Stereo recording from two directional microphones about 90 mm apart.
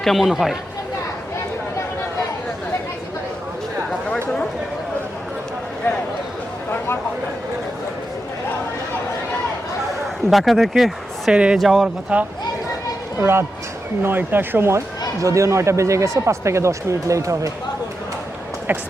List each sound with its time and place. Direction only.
0.0 s speech: centre (ahead or behind)
6.7 s a sound: 25° left (ahead or behind)
10.2 s speech: centre (ahead or behind)
12.1 s speech: 15° right (ahead or behind)
13.1 s speech: 30° right (ahead or behind)